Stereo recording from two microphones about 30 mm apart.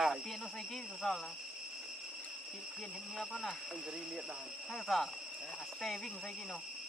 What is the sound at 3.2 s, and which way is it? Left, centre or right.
Speech, centre.